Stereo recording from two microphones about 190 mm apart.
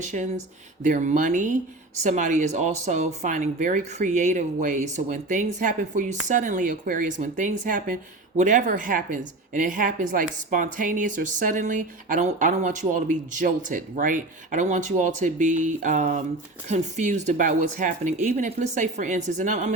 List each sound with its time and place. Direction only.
0.0 s speech: 40° right (ahead or behind)